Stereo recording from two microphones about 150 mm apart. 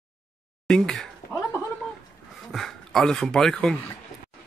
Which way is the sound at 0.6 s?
5° left (ahead or behind).